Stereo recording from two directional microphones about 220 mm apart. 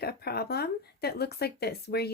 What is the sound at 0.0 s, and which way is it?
Speech, 45° left (ahead or behind).